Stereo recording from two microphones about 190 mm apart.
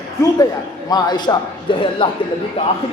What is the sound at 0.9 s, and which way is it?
A man's voice, 20° left (ahead or behind).